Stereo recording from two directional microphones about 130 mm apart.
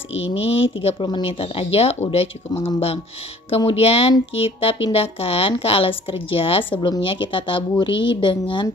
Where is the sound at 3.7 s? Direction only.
50° left (ahead or behind).